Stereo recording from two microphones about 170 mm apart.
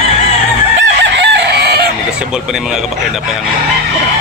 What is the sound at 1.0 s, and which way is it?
Chicken, 90° right.